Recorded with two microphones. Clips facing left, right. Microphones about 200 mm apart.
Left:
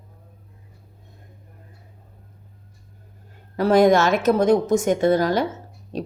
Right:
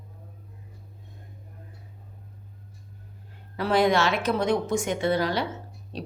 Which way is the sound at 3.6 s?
45° left (ahead or behind).